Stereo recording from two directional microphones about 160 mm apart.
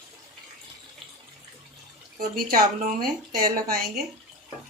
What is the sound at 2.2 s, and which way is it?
A woman's voice, 65° right (ahead or behind).